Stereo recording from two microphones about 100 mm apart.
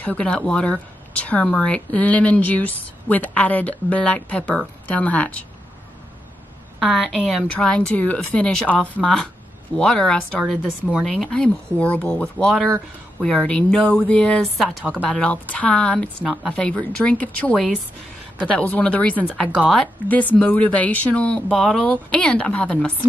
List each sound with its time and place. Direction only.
0.0 s a woman's voice: 15° left (ahead or behind)
6.8 s a woman's voice: centre (ahead or behind)
14.6 s a woman's voice: centre (ahead or behind)
19.2 s a woman's voice: 5° left (ahead or behind)
20.1 s a woman's voice: 15° left (ahead or behind)